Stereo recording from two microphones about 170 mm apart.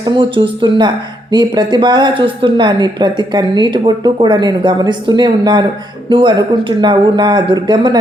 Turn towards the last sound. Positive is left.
turn(degrees=-25)  # may be behind; listen again after turning